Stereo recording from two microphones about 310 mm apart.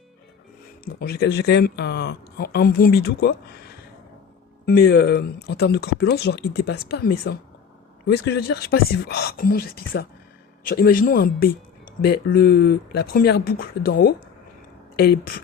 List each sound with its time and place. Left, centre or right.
0.9 s speech: left
4.6 s speech: left